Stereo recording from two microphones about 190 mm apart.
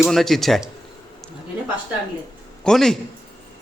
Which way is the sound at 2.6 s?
Centre (ahead or behind).